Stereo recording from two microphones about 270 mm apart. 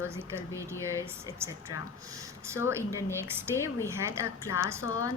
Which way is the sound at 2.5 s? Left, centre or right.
Centre.